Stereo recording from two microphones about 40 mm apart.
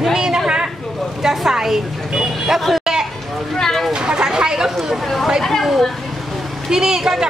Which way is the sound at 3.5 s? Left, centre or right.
Centre.